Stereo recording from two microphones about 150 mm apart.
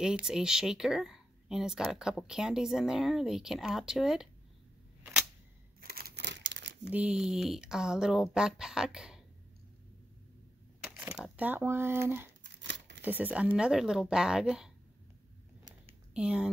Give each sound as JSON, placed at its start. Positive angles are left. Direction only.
{"t": 0.0, "sound": "speech", "side_deg": -5}
{"t": 5.8, "sound": "a sound", "side_deg": -90}
{"t": 6.9, "sound": "speech", "side_deg": -10}
{"t": 10.8, "sound": "speech", "side_deg": -10}
{"t": 16.1, "sound": "speech", "side_deg": -5}